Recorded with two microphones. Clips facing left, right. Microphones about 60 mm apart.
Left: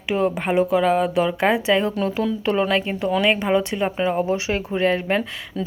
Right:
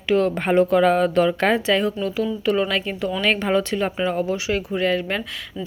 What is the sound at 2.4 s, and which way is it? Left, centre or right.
Speech, left.